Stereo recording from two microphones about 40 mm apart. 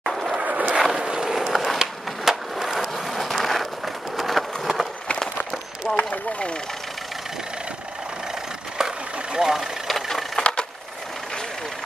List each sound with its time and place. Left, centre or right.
0.0 s a sound: centre
0.5 s vehicle: right
0.8 s vehicle: centre
1.5 s skateboard: centre
3.4 s a sound: centre
5.9 s vehicle: centre
8.7 s vehicle: centre
9.8 s vehicle: centre
10.4 s a sound: left